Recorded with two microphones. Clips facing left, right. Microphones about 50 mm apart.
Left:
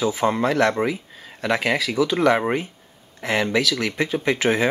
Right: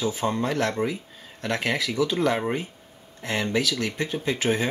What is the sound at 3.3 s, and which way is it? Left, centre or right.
Speech, left.